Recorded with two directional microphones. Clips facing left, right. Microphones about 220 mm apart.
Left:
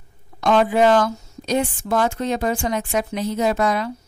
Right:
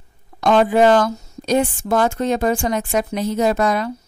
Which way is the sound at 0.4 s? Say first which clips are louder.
Right 2 dB; 45° right (ahead or behind).